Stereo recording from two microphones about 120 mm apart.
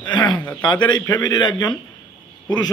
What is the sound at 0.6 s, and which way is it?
A man's voice, 40° left (ahead or behind).